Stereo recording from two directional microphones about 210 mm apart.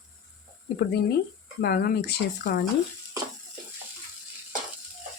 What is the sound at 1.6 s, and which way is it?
Speech, 50° left (ahead or behind).